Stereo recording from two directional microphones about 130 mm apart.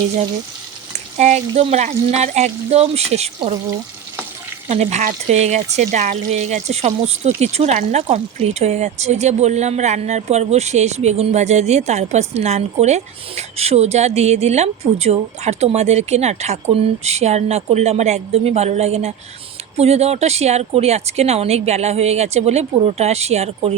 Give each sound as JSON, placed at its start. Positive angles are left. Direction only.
{"t": 1.2, "sound": "speech", "side_deg": -60}
{"t": 4.7, "sound": "speech", "side_deg": -60}